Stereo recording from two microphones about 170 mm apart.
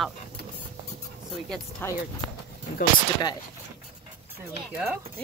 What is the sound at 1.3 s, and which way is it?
Speech, 5° left (ahead or behind).